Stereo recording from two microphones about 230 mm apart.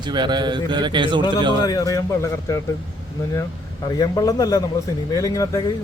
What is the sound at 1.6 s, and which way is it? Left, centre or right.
Speech, centre.